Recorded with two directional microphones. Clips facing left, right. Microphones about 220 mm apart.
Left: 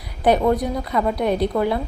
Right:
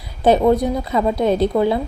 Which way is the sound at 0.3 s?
25° right (ahead or behind).